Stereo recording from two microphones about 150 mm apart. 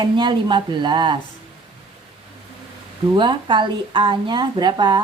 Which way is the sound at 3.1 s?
30° right (ahead or behind).